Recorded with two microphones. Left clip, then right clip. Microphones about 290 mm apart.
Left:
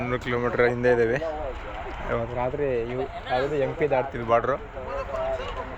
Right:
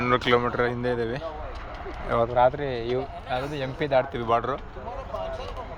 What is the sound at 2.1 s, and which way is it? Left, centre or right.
Speech, centre.